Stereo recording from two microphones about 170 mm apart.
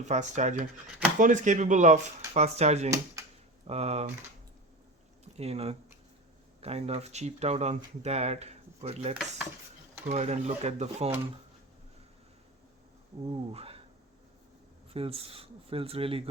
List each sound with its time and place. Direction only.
0.0 s speech: 45° right (ahead or behind)
5.2 s speech: 40° right (ahead or behind)
13.3 s speech: 35° right (ahead or behind)
14.9 s speech: 35° right (ahead or behind)